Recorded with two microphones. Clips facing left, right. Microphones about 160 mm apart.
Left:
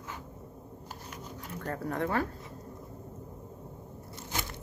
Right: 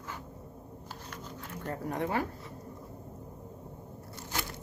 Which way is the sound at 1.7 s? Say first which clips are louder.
Left 1 dB; 20° right (ahead or behind).